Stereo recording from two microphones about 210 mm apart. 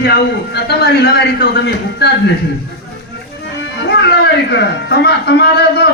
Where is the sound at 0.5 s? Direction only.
50° left (ahead or behind).